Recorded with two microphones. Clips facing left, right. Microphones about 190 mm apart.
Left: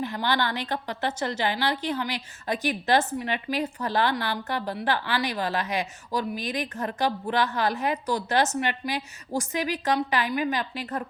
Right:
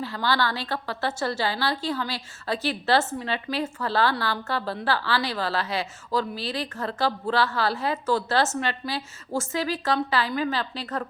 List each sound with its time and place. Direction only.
0.0 s a woman's voice: 20° left (ahead or behind)